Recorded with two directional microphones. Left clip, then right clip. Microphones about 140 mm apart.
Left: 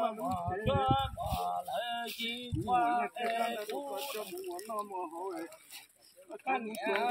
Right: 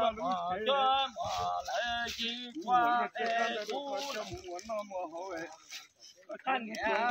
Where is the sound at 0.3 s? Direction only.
25° left (ahead or behind).